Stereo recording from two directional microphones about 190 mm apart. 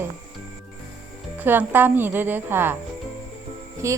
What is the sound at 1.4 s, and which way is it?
A woman's voice, 10° right (ahead or behind).